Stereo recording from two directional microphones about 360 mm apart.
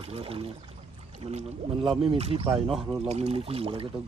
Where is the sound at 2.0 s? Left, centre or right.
Centre.